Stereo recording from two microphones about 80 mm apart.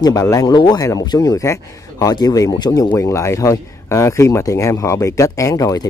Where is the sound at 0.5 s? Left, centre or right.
Left.